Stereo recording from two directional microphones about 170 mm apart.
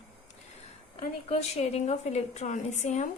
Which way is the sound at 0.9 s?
40° left (ahead or behind).